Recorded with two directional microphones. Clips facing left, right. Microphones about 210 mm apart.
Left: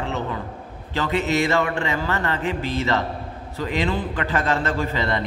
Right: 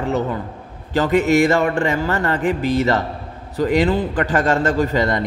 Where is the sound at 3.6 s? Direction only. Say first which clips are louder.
Right 7 dB; 40° right (ahead or behind).